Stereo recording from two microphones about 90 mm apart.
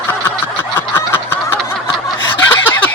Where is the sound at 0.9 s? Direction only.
25° left (ahead or behind).